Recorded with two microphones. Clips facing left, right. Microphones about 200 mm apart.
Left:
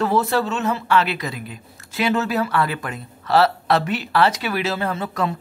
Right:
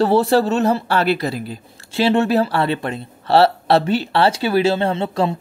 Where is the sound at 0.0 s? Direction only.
30° right (ahead or behind).